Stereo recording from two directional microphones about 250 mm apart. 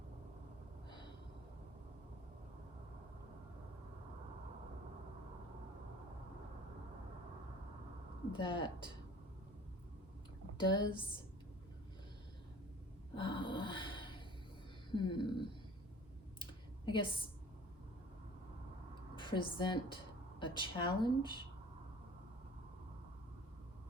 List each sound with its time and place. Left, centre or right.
8.3 s speech: centre
10.6 s speech: centre
13.1 s a sound: centre
14.9 s speech: centre
16.4 s a sound: centre
19.1 s a woman's voice: centre